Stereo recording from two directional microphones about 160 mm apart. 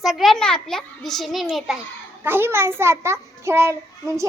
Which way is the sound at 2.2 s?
15° right (ahead or behind).